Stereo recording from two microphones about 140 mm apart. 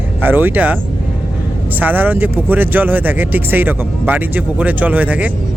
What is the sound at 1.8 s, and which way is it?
Speech, 15° right (ahead or behind).